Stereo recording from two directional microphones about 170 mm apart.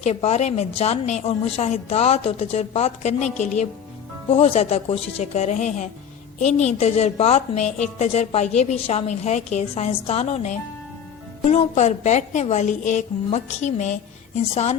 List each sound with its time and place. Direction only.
0.0 s a woman's voice: 40° left (ahead or behind)